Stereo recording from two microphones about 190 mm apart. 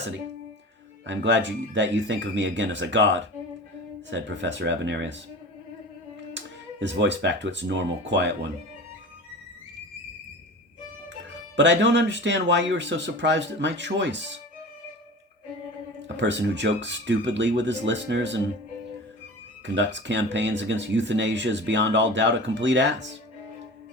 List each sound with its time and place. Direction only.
1.0 s speech: 70° right (ahead or behind)
6.3 s speech: 70° right (ahead or behind)
11.5 s speech: 70° right (ahead or behind)
16.0 s speech: 70° right (ahead or behind)
19.6 s speech: 70° right (ahead or behind)